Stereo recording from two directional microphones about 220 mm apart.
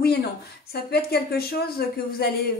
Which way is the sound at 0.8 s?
45° left (ahead or behind).